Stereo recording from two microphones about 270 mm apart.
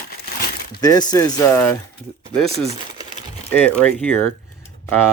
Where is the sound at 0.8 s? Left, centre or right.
Centre.